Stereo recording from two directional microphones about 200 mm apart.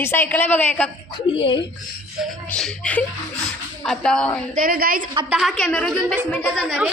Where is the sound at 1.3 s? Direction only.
25° left (ahead or behind).